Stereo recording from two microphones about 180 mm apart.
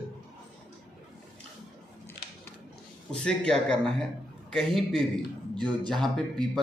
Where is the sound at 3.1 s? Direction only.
5° left (ahead or behind).